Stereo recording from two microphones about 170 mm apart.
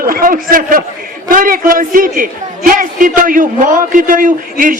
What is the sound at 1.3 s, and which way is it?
A man's voice, 55° right (ahead or behind).